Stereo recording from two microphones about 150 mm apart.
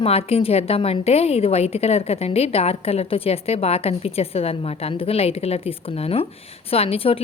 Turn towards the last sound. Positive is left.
turn(degrees=40)  # may be behind; listen again after turning